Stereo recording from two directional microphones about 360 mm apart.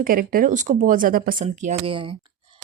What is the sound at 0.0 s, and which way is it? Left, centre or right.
Speech, right.